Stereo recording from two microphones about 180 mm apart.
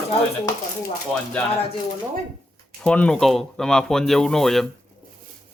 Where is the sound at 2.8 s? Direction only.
5° left (ahead or behind).